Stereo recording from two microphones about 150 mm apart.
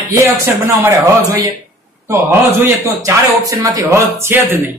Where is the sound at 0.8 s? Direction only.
20° right (ahead or behind).